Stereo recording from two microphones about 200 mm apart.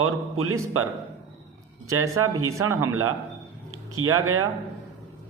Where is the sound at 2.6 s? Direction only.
90° right.